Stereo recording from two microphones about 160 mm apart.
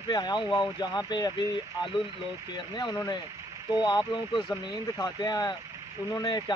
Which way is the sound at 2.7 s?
25° left (ahead or behind).